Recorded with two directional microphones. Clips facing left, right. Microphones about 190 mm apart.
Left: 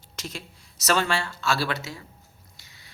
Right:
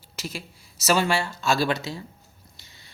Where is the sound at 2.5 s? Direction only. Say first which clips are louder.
Right 1 dB; 30° right (ahead or behind).